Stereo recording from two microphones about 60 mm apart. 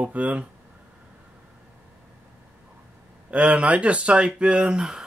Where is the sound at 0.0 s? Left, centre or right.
Right.